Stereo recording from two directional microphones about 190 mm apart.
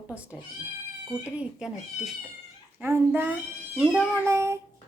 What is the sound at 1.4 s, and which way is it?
Speech, 5° right (ahead or behind).